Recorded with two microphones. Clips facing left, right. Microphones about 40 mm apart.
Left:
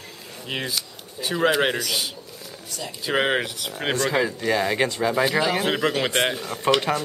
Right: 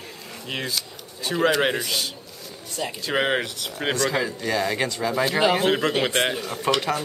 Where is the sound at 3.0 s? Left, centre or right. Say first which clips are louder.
Left 2 dB; centre.